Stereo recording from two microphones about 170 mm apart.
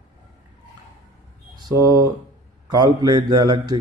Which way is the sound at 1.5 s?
20° right (ahead or behind).